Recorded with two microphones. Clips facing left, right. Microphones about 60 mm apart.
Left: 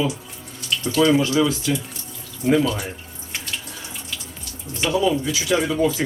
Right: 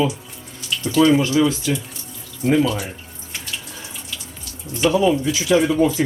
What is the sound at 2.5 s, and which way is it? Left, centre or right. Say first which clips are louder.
Speech: right 1 dB; centre.